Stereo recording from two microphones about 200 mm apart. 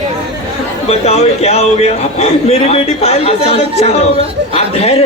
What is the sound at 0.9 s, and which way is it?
A man's voice, 30° left (ahead or behind).